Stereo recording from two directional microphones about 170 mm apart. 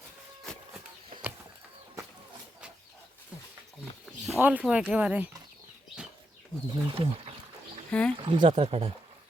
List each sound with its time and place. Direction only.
4.4 s speech: 10° right (ahead or behind)
6.7 s speech: 35° right (ahead or behind)
7.9 s speech: 5° left (ahead or behind)
8.1 s speech: 30° right (ahead or behind)